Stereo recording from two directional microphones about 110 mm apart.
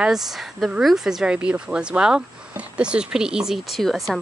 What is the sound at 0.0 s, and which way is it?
Speech, 5° right (ahead or behind).